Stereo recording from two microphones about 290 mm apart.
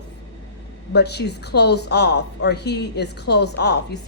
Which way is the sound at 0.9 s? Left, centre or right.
Left.